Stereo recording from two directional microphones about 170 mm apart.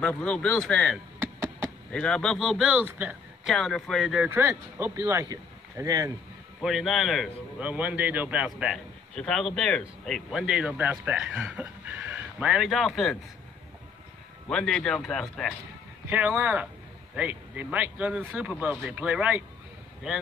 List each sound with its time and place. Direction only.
0.0 s a man's voice: 5° left (ahead or behind)
1.2 s a sound: 15° right (ahead or behind)
1.9 s a man's voice: 5° left (ahead or behind)
3.5 s speech: centre (ahead or behind); by 6.1 s 20° right (ahead or behind)
6.6 s a man's voice: centre (ahead or behind)
14.5 s a man's voice: 5° left (ahead or behind)
16.1 s speech: 10° right (ahead or behind)